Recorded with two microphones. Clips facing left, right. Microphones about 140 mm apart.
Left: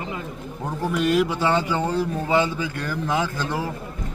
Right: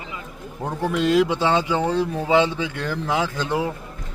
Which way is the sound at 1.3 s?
20° right (ahead or behind).